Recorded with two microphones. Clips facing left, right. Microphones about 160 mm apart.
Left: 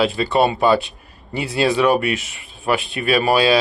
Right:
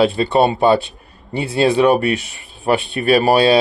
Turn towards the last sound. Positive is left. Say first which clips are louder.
# right 3 dB
turn(degrees=-30)  # may be behind; listen again after turning